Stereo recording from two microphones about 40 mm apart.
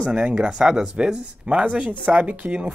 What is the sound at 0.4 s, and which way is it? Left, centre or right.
Speech, right.